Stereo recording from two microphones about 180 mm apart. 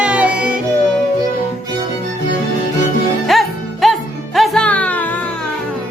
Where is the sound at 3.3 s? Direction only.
Centre (ahead or behind).